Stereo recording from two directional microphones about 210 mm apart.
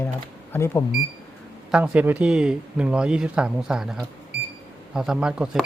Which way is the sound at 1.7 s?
5° right (ahead or behind).